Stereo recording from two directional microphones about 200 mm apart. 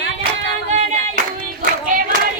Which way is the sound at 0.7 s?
35° right (ahead or behind).